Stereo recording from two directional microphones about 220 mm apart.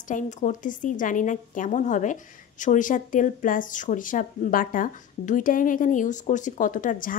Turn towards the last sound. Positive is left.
turn(degrees=40)  # may be behind; listen again after turning